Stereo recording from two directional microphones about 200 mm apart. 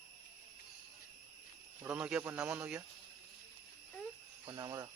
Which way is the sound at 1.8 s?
5° right (ahead or behind).